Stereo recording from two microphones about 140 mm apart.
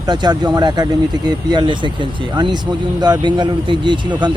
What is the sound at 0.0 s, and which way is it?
Speech, 30° right (ahead or behind).